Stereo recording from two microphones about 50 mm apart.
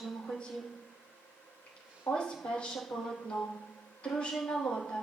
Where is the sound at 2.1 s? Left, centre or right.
Centre.